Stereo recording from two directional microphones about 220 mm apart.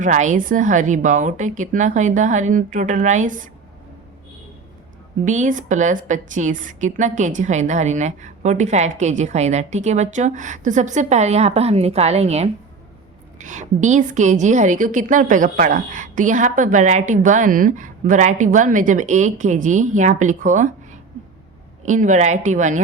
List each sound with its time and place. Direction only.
0.0 s a woman's voice: 35° right (ahead or behind)
5.2 s a woman's voice: 35° right (ahead or behind)